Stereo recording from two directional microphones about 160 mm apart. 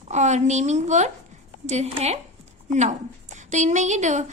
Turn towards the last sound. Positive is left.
turn(degrees=-45)  # may be behind; listen again after turning